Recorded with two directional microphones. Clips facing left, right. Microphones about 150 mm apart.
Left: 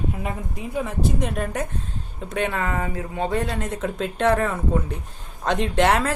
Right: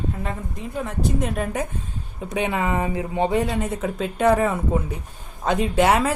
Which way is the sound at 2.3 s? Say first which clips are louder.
Right 2 dB; 10° right (ahead or behind).